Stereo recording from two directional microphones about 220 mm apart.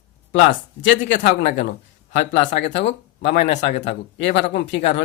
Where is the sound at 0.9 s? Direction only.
55° left (ahead or behind).